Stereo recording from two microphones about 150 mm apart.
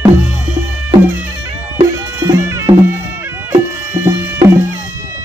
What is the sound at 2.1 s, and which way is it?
Music, 20° right (ahead or behind).